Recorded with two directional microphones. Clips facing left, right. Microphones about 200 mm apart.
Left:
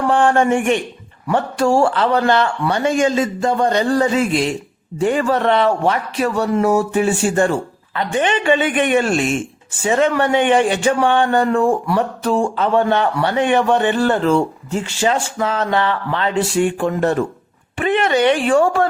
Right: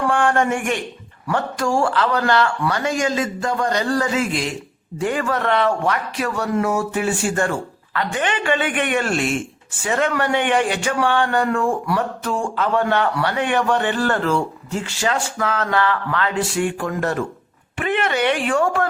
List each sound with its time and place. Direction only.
0.1 s speech: 25° left (ahead or behind)